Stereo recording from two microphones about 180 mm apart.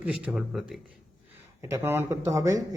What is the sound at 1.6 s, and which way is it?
Speech, 15° right (ahead or behind).